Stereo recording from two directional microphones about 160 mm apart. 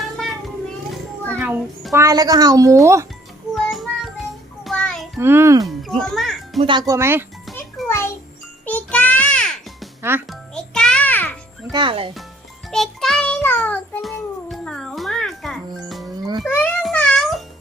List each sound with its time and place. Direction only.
1.4 s a child's voice: 10° right (ahead or behind)
1.9 s speech: 20° right (ahead or behind)
3.5 s child singing: centre (ahead or behind)
5.2 s a child's voice: 15° right (ahead or behind)
6.0 s music: centre (ahead or behind)
6.6 s speech: 30° right (ahead or behind)
7.9 s a sound: 15° left (ahead or behind)
8.6 s music: 10° left (ahead or behind)
10.0 s a child's voice: 15° right (ahead or behind)
10.2 s music: 5° left (ahead or behind)
11.7 s speech: 30° right (ahead or behind)
12.7 s music: centre (ahead or behind)
16.5 s a sound: 10° left (ahead or behind)
16.8 s music: 5° left (ahead or behind)